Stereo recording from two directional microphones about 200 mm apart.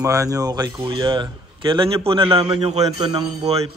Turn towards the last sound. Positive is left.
turn(degrees=-30)  # may be behind; listen again after turning